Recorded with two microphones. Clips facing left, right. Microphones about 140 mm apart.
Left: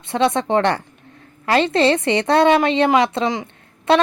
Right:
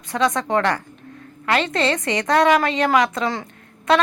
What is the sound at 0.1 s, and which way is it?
A woman's voice, 30° left (ahead or behind).